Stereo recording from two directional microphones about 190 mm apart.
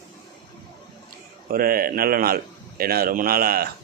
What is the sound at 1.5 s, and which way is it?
A man's voice, 50° right (ahead or behind).